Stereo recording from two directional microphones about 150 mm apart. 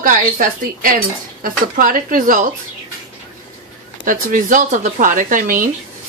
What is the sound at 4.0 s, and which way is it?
A woman's voice, 65° right (ahead or behind).